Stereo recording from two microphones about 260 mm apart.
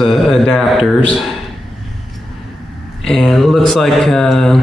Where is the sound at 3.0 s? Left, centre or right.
Centre.